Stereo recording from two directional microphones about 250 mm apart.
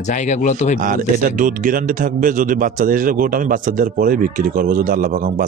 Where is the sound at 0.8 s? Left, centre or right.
Right.